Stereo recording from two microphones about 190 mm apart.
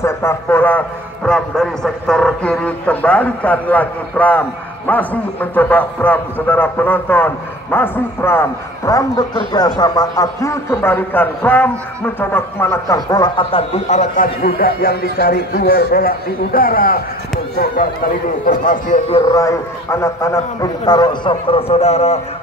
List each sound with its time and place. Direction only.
0.0 s a man's voice: 15° left (ahead or behind); by 17.0 s 50° left (ahead or behind)
18.4 s a man's voice: 45° left (ahead or behind)
19.3 s a man's voice: 15° left (ahead or behind); by 22.2 s 35° left (ahead or behind)